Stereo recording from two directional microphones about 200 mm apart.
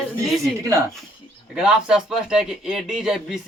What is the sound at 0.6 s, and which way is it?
Speech, 15° right (ahead or behind).